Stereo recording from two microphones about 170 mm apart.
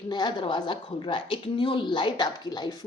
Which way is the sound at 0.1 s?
25° left (ahead or behind).